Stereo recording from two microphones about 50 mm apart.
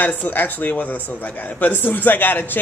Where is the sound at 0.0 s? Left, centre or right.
Left.